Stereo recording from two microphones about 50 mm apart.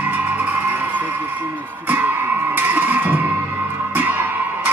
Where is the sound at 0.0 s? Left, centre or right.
Right.